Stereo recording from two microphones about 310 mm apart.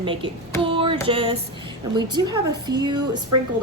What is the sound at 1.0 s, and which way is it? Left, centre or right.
A woman's voice, centre.